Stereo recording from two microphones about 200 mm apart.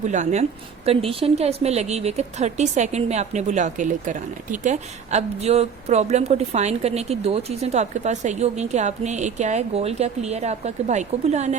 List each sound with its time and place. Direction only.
0.1 s a woman's voice: 35° right (ahead or behind)